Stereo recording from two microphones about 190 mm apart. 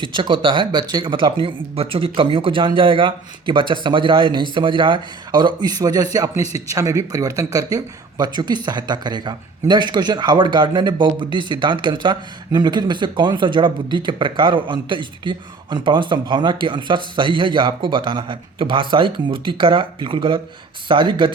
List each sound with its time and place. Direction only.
0.0 s a man's voice: 25° right (ahead or behind)